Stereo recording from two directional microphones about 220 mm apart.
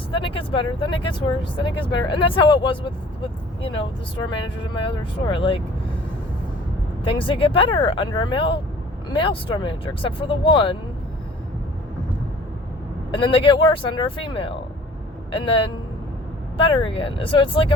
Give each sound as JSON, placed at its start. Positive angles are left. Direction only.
{"t": 0.1, "sound": "speech", "side_deg": 25}
{"t": 7.0, "sound": "speech", "side_deg": 25}
{"t": 13.1, "sound": "speech", "side_deg": 20}